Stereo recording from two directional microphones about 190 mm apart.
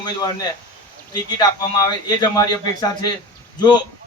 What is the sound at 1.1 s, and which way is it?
A man's voice, 20° left (ahead or behind).